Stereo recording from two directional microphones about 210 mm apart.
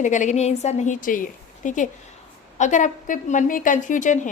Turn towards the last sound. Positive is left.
turn(degrees=35)  # may be behind; listen again after turning